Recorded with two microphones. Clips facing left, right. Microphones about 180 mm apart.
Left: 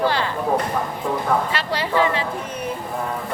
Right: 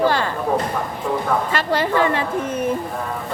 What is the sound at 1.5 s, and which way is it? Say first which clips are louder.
Speech: right 4 dB; 50° right (ahead or behind).